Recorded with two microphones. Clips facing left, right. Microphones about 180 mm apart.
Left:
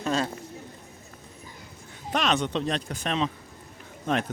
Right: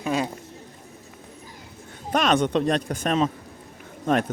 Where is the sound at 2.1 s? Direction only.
50° right (ahead or behind).